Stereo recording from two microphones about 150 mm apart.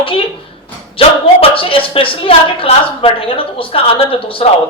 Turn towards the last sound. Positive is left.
turn(degrees=35)  # may be behind; listen again after turning